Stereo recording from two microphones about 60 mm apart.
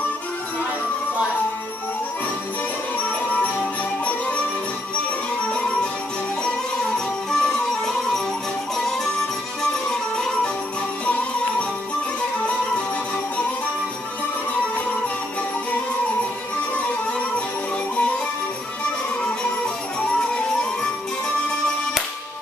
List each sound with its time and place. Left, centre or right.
3.3 s music: left
7.2 s music: centre
12.4 s music: left
20.2 s music: centre